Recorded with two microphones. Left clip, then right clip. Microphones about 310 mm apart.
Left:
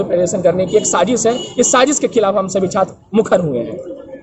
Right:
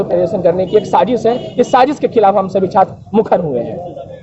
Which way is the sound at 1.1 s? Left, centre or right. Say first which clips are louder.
Right 2 dB; left.